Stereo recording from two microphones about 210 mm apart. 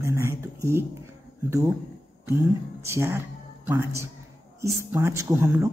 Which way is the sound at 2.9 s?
10° right (ahead or behind).